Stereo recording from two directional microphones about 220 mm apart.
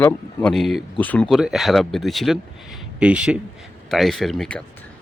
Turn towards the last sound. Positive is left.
turn(degrees=0)  # may be behind; listen again after turning